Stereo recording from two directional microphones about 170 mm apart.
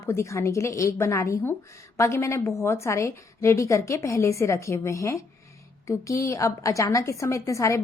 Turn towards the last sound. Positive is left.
turn(degrees=20)  # may be behind; listen again after turning